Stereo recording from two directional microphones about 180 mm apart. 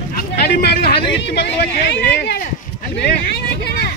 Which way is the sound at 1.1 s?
70° left (ahead or behind).